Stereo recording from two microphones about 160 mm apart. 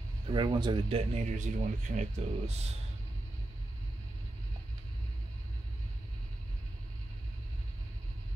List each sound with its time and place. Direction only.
0.3 s speech: 30° right (ahead or behind)